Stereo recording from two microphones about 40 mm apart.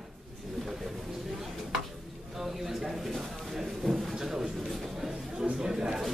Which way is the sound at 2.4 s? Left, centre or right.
Centre.